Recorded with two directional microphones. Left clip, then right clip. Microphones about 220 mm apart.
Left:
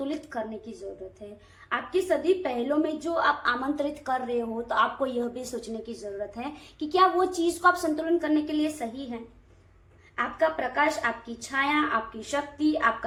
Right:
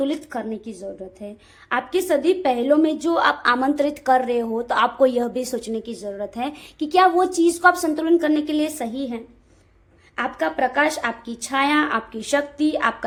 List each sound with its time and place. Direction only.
0.0 s a woman's voice: 45° right (ahead or behind)
1.7 s a woman's voice: 45° right (ahead or behind)
10.2 s a woman's voice: 50° right (ahead or behind)